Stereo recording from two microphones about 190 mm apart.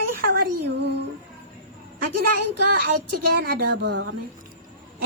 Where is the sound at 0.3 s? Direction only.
60° right (ahead or behind).